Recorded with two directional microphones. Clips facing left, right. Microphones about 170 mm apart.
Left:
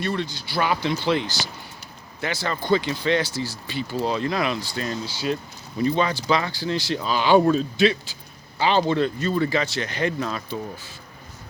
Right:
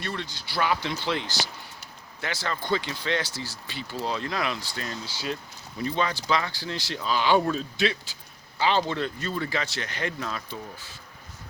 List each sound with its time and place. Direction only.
0.0 s speech: 15° left (ahead or behind)